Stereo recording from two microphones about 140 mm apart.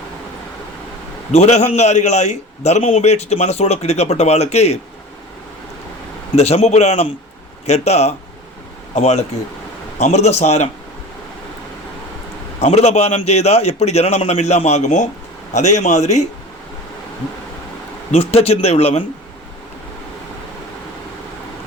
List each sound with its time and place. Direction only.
1.3 s a man's voice: 55° left (ahead or behind)
6.3 s a man's voice: 50° left (ahead or behind)
12.5 s a man's voice: 50° left (ahead or behind)
18.1 s a man's voice: 45° left (ahead or behind)